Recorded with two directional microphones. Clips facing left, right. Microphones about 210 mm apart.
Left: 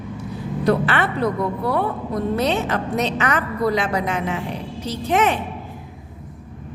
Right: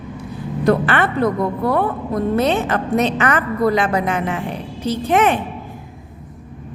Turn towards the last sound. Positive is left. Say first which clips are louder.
# right 3 dB
turn(degrees=-55)  # may be behind; listen again after turning